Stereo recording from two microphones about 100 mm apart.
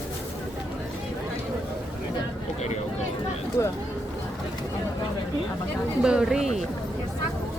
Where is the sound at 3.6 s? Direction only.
30° left (ahead or behind).